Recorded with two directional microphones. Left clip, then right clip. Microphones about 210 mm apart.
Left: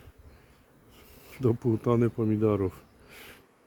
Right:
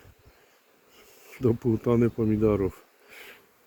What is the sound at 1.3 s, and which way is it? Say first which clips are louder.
Speech: right 2 dB; 5° left (ahead or behind).